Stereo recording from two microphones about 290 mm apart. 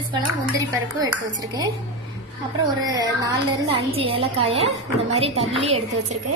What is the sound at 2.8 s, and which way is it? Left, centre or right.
A woman's voice, centre.